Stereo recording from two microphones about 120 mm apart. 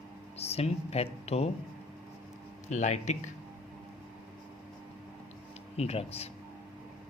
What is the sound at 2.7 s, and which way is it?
Speech, 75° left (ahead or behind).